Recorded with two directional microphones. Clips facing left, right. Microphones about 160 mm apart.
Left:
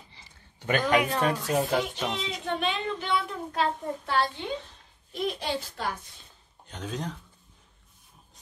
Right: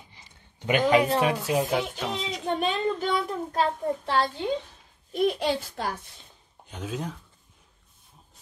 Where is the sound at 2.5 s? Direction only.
40° right (ahead or behind).